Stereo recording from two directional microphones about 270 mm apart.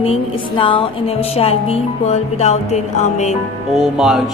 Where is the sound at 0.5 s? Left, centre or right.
Centre.